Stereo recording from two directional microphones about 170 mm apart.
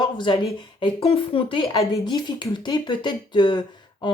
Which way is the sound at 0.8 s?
30° left (ahead or behind).